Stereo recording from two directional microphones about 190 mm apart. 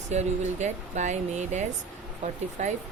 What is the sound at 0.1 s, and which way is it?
Speech, 35° right (ahead or behind).